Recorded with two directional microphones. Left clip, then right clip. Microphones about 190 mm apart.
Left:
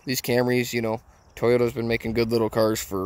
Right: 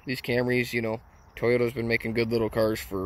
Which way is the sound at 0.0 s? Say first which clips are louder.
Left 4 dB; 30° left (ahead or behind).